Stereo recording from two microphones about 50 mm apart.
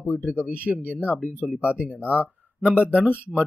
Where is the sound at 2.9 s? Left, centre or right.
Right.